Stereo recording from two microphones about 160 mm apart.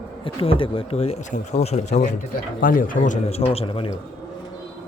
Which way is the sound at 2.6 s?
60° left (ahead or behind).